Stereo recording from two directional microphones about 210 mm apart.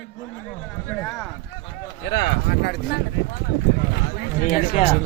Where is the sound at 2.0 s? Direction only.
50° left (ahead or behind).